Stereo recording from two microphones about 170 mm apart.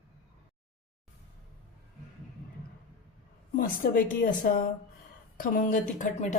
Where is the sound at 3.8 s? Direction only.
65° left (ahead or behind).